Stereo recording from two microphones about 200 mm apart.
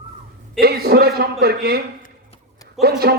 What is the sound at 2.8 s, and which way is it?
Speech, 50° right (ahead or behind).